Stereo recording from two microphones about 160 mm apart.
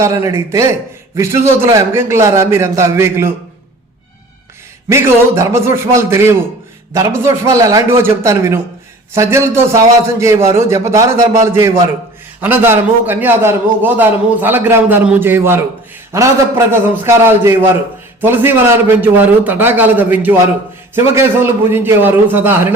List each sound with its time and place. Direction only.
0.0 s a man's voice: 20° right (ahead or behind)
4.9 s a man's voice: 15° right (ahead or behind)